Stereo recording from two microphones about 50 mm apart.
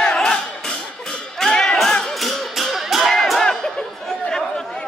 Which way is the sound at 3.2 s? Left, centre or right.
Centre.